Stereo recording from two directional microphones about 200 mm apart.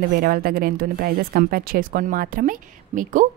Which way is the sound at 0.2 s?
50° right (ahead or behind).